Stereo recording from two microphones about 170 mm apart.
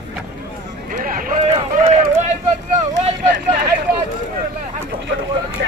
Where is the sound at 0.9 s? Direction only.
55° right (ahead or behind).